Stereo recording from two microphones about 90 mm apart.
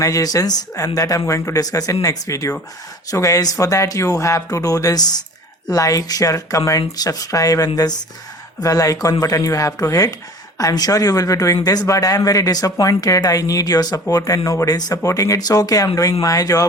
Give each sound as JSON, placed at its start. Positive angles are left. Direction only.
{"t": 0.0, "sound": "speech", "side_deg": 40}